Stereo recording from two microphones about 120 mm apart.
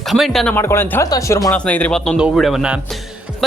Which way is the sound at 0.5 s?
20° left (ahead or behind).